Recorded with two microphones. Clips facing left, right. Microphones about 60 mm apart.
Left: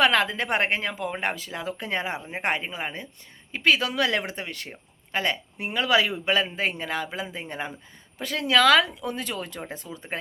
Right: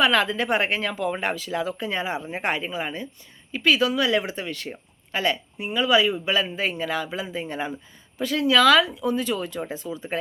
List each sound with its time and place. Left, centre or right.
0.0 s speech: left
0.8 s speech: left
4.3 s speech: left
5.5 s speech: left
6.2 s speech: left